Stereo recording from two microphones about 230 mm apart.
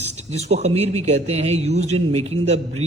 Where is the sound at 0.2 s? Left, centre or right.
Right.